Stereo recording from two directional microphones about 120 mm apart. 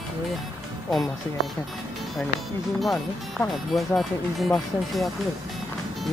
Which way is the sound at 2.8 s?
Centre (ahead or behind).